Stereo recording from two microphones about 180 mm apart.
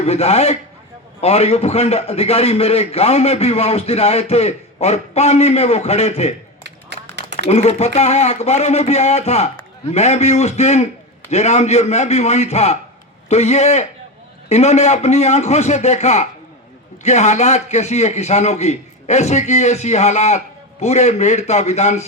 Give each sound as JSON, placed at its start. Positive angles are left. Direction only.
{"t": 0.0, "sound": "a man's voice", "side_deg": 35}
{"t": 7.3, "sound": "a man's voice", "side_deg": 35}